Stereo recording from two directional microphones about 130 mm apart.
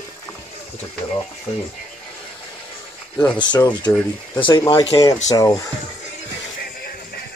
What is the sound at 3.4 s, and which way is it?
Speech, 35° left (ahead or behind).